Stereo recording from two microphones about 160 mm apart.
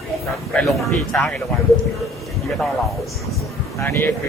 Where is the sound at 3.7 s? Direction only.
20° left (ahead or behind).